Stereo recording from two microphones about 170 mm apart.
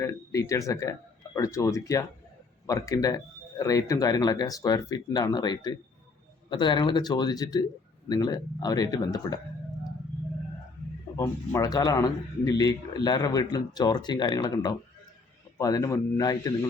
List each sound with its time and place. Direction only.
0.0 s a man's voice: 20° left (ahead or behind)
11.2 s a man's voice: 20° left (ahead or behind)